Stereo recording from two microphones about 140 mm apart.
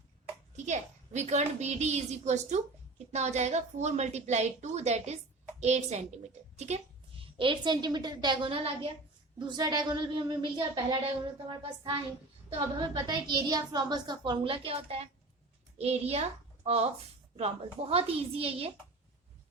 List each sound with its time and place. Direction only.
0.5 s a woman's voice: 55° right (ahead or behind)